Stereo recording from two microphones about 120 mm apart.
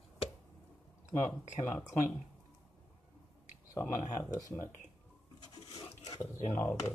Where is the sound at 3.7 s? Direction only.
25° left (ahead or behind).